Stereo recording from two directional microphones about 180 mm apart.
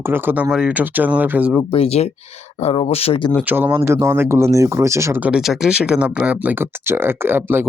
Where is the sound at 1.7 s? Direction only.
35° left (ahead or behind).